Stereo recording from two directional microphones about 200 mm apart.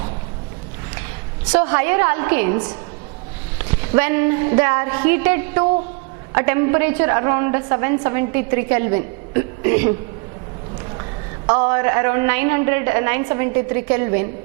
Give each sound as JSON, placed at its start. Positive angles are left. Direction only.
{"t": 1.5, "sound": "a woman's voice", "side_deg": -15}
{"t": 11.4, "sound": "a woman's voice", "side_deg": -20}